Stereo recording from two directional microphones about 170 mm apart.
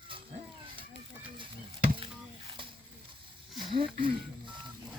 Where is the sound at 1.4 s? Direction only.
30° right (ahead or behind).